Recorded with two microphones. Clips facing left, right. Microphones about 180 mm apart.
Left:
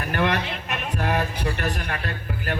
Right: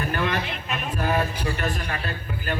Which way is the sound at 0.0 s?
70° left (ahead or behind).